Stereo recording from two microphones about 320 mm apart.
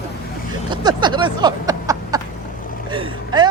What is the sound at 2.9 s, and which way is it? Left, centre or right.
Speech, centre.